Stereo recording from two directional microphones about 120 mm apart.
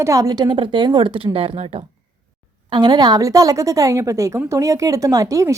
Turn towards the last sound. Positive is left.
turn(degrees=-25)  # may be behind; listen again after turning